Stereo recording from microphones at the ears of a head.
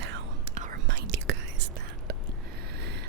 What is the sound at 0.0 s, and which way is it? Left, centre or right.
Whispering, right.